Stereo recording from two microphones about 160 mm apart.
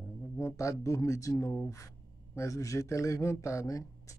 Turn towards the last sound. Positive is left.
turn(degrees=20)  # may be behind; listen again after turning